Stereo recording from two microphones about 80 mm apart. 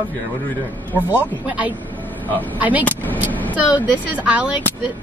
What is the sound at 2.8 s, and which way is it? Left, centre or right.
Vehicle, left.